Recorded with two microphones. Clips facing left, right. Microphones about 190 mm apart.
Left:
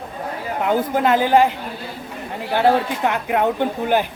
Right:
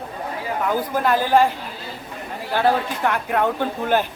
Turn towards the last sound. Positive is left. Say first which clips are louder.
# left 2 dB
turn(degrees=15)  # may be behind; listen again after turning